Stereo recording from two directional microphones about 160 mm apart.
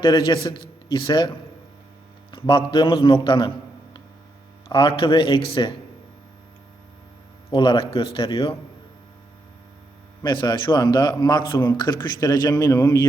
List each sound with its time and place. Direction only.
0.0 s speech: 30° left (ahead or behind)
2.3 s a man's voice: 30° left (ahead or behind)
4.7 s a man's voice: 30° left (ahead or behind)
7.5 s a man's voice: 30° left (ahead or behind)
10.2 s speech: 30° left (ahead or behind)